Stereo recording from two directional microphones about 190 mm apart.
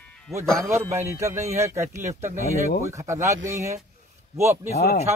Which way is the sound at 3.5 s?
40° right (ahead or behind).